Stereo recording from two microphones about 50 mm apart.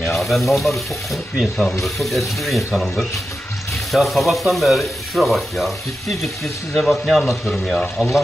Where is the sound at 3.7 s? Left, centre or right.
Centre.